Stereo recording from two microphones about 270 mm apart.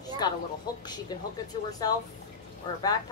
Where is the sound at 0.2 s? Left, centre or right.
Centre.